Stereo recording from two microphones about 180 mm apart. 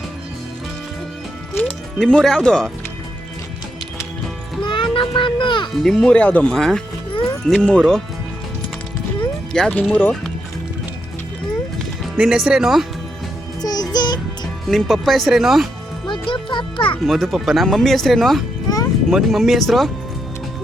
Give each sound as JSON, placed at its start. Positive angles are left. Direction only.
{"t": 1.5, "sound": "speech", "side_deg": 5}
{"t": 4.6, "sound": "a sound", "side_deg": 25}
{"t": 5.8, "sound": "speech", "side_deg": 5}
{"t": 9.5, "sound": "speech", "side_deg": 5}
{"t": 12.1, "sound": "speech", "side_deg": -5}
{"t": 13.6, "sound": "music", "side_deg": 20}
{"t": 14.7, "sound": "speech", "side_deg": 0}
{"t": 16.0, "sound": "music", "side_deg": 25}
{"t": 17.1, "sound": "speech", "side_deg": 0}